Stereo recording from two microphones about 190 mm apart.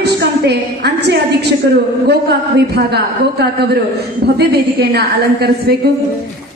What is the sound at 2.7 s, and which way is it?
A woman's voice, 60° right (ahead or behind).